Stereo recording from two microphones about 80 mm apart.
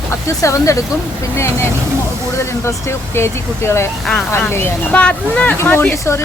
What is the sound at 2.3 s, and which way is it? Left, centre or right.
Speech, left.